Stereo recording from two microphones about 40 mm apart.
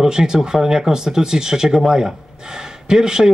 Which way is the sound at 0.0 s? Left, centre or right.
Centre.